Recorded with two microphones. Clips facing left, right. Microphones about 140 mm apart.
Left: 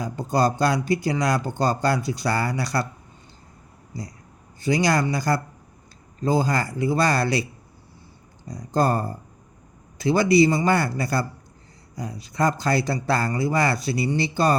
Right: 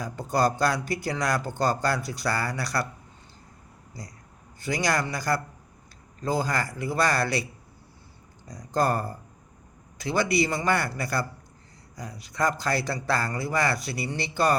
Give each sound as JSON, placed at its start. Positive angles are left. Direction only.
{"t": 0.0, "sound": "speech", "side_deg": 20}
{"t": 4.6, "sound": "speech", "side_deg": 25}
{"t": 8.4, "sound": "speech", "side_deg": 25}